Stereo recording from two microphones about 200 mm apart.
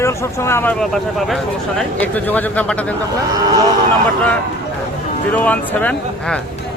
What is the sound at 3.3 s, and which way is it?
Speech, 20° right (ahead or behind).